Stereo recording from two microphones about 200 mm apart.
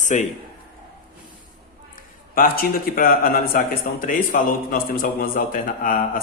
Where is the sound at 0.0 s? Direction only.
40° left (ahead or behind).